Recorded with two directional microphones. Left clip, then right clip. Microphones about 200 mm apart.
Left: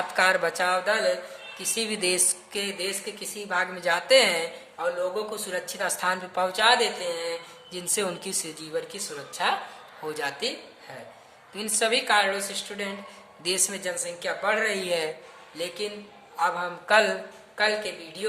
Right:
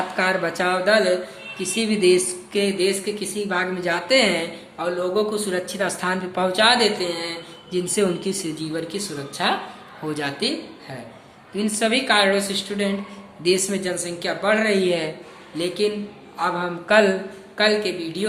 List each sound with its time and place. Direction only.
0.2 s a woman's voice: 30° left (ahead or behind)
4.8 s a woman's voice: 10° left (ahead or behind)
11.5 s a woman's voice: 25° left (ahead or behind)
13.4 s a woman's voice: 25° left (ahead or behind)